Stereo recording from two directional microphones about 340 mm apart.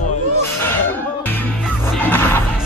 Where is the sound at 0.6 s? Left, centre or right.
Centre.